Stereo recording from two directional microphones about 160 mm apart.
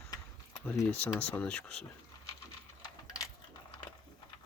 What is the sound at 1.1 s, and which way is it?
Speech, 10° left (ahead or behind).